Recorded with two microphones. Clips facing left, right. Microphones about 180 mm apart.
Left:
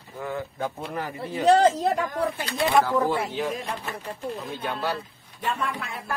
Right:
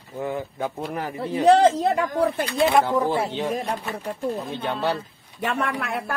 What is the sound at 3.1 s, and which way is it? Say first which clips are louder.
Speech: right 2 dB; 30° right (ahead or behind).